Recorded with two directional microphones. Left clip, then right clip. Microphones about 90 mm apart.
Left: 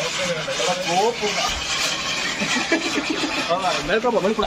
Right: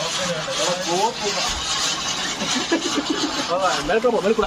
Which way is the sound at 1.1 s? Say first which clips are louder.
Left 1 dB; 25° right (ahead or behind).